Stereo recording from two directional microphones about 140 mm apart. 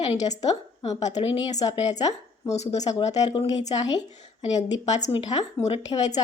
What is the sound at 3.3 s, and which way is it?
Speech, 40° left (ahead or behind).